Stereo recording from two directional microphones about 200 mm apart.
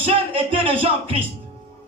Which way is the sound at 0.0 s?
25° right (ahead or behind).